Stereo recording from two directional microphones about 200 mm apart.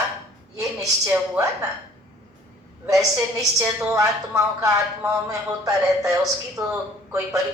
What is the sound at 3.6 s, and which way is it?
Quack, 15° right (ahead or behind).